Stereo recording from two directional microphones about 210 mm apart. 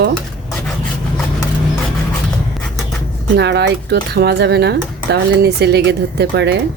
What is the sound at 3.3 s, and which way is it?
A woman's voice, 50° right (ahead or behind).